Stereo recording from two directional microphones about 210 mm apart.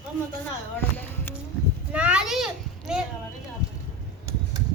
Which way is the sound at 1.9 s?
5° right (ahead or behind).